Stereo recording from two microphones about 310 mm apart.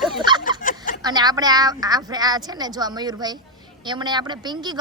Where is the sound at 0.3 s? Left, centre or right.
Centre.